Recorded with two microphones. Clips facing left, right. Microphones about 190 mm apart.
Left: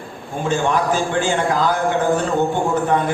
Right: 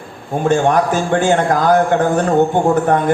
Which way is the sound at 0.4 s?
55° right (ahead or behind).